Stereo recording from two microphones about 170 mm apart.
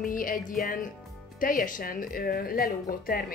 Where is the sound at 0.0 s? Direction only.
55° left (ahead or behind).